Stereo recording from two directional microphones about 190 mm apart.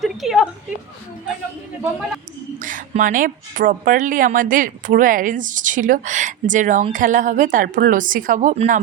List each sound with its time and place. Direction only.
0.0 s a woman's voice: centre (ahead or behind)
2.6 s speech: 45° right (ahead or behind)